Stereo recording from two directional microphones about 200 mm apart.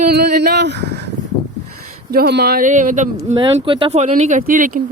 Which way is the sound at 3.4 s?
25° right (ahead or behind).